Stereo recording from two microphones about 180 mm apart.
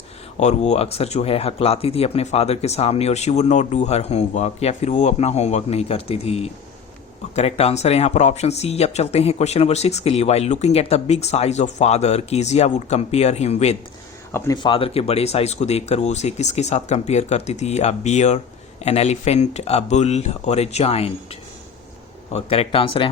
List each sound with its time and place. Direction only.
0.3 s speech: 40° left (ahead or behind)
14.3 s speech: 20° left (ahead or behind); by 21.1 s 35° left (ahead or behind)
22.3 s speech: 35° left (ahead or behind)